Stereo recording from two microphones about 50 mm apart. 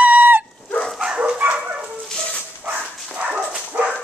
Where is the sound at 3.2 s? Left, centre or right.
Right.